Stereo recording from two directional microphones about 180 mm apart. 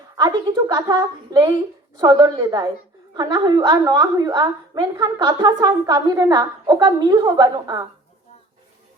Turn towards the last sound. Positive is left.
turn(degrees=-20)  # may be behind; listen again after turning